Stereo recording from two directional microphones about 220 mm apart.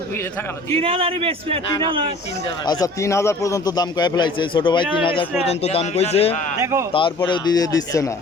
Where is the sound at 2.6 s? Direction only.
15° left (ahead or behind).